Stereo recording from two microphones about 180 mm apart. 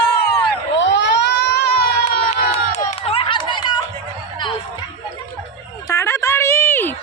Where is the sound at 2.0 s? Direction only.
40° left (ahead or behind).